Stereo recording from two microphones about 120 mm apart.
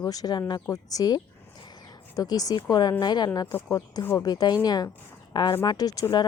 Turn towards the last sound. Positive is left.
turn(degrees=30)  # may be behind; listen again after turning